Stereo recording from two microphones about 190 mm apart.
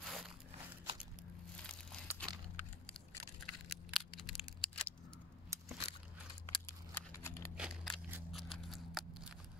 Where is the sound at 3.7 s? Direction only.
Centre (ahead or behind).